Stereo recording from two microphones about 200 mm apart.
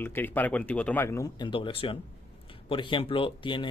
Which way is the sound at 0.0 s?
10° left (ahead or behind).